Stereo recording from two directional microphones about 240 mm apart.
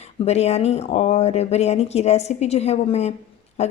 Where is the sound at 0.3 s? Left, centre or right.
Left.